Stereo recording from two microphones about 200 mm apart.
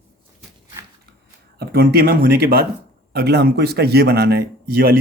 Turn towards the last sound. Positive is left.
turn(degrees=-50)  # may be behind; listen again after turning